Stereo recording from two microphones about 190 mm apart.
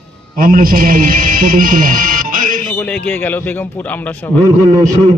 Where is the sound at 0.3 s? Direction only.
50° right (ahead or behind).